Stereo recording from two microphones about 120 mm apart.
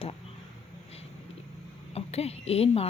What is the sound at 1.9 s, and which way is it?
Speech, 60° left (ahead or behind).